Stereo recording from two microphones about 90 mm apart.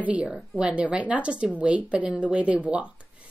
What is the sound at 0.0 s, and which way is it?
A woman's voice, 15° right (ahead or behind).